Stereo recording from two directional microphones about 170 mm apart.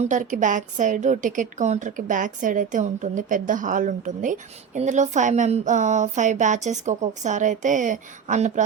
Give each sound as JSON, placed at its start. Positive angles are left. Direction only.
{"t": 0.0, "sound": "a woman's voice", "side_deg": -45}